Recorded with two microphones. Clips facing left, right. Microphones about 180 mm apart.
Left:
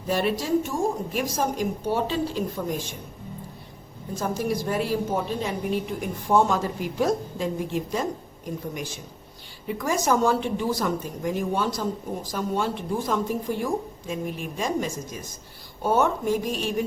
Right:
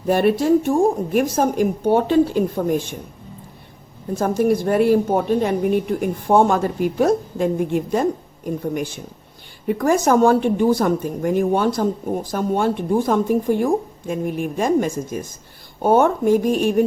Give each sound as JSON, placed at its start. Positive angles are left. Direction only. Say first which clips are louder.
{"t": 0.1, "sound": "a woman's voice", "louder": "right 8 dB", "side_deg": -55}
{"t": 4.1, "sound": "a woman's voice", "louder": "right 9 dB", "side_deg": -55}
{"t": 9.6, "sound": "a woman's voice", "louder": "right 7 dB", "side_deg": -55}